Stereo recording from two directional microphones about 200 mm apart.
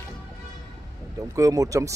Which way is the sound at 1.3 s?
15° right (ahead or behind).